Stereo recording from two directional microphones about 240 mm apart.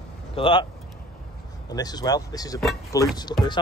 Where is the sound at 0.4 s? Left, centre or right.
Left.